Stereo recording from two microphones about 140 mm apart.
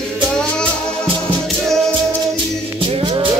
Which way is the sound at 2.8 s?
35° right (ahead or behind).